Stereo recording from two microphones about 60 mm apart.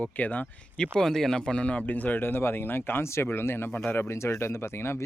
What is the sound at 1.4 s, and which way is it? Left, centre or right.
Speech, centre.